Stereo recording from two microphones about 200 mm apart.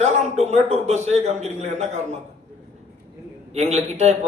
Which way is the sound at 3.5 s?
35° right (ahead or behind).